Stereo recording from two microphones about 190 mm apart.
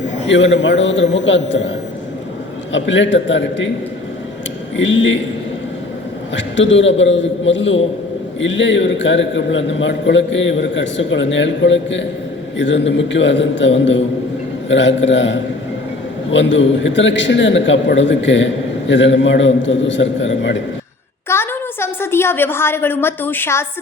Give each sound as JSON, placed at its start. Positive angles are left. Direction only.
{"t": 0.3, "sound": "a man's voice", "side_deg": 75}
{"t": 2.7, "sound": "a man's voice", "side_deg": 75}
{"t": 4.8, "sound": "a man's voice", "side_deg": 75}
{"t": 6.3, "sound": "a man's voice", "side_deg": 75}
{"t": 21.2, "sound": "a woman's voice", "side_deg": 10}